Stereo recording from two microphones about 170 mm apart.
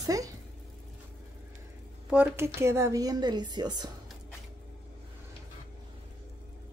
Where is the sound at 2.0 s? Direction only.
10° right (ahead or behind).